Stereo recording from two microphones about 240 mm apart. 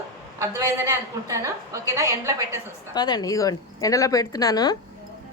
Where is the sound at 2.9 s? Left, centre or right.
Centre.